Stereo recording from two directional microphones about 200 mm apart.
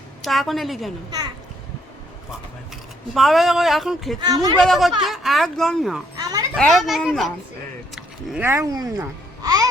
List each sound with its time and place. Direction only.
0.2 s speech: centre (ahead or behind)
3.2 s speech: centre (ahead or behind)
4.2 s speech: 20° right (ahead or behind)
4.6 s speech: centre (ahead or behind)
6.1 s children playing: 20° right (ahead or behind)
6.6 s speech: centre (ahead or behind)
7.9 s a sound: centre (ahead or behind)
8.4 s a child's voice: 15° right (ahead or behind)